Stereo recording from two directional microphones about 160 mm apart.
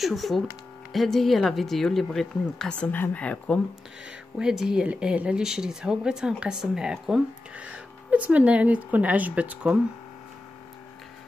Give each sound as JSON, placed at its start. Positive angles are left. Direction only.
{"t": 0.0, "sound": "speech", "side_deg": 0}
{"t": 4.4, "sound": "speech", "side_deg": -5}